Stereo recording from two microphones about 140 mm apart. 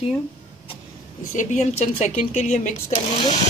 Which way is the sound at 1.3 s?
60° left (ahead or behind).